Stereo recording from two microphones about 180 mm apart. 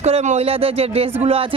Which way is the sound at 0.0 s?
35° right (ahead or behind).